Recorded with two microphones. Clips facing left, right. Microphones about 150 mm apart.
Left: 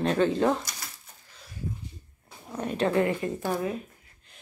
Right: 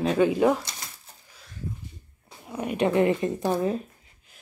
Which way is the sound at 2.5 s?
10° right (ahead or behind).